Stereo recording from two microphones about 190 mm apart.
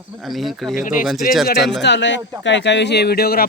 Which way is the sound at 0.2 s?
Centre (ahead or behind).